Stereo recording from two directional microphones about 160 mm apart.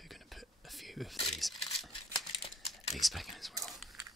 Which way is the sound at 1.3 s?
Centre (ahead or behind).